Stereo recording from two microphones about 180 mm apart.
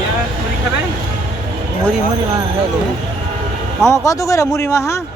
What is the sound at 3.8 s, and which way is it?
A man's voice, 15° left (ahead or behind).